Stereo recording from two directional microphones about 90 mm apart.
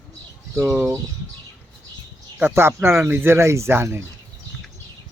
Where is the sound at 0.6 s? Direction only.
30° right (ahead or behind).